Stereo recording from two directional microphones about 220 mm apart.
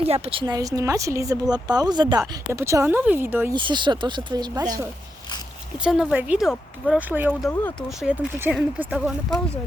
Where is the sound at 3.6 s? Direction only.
20° right (ahead or behind).